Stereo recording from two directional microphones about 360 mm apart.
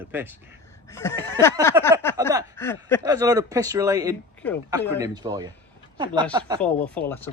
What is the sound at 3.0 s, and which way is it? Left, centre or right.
Speech, centre.